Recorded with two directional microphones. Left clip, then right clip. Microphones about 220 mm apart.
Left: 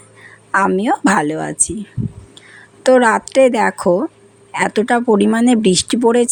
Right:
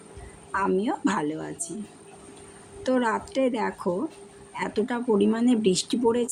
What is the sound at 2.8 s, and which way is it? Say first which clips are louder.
Speech: left 14 dB; 40° left (ahead or behind).